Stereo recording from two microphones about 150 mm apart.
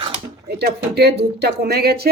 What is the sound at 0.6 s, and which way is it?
Speech, 90° right.